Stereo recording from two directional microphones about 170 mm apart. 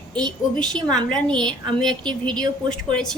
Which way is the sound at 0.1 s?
5° left (ahead or behind).